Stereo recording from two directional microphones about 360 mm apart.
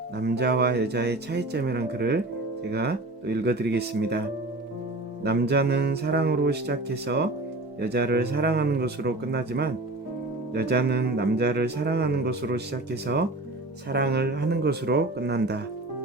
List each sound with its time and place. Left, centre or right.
0.2 s speech: right
5.2 s speech: right